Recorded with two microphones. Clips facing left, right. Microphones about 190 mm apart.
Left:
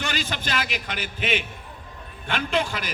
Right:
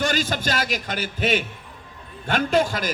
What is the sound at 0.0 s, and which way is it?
A man's voice, 40° right (ahead or behind).